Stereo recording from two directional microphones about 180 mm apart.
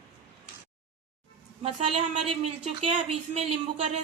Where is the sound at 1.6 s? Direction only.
30° right (ahead or behind).